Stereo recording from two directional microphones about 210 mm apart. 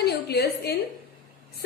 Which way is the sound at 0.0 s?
50° left (ahead or behind).